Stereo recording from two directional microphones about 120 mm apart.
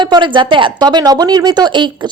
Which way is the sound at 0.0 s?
40° right (ahead or behind).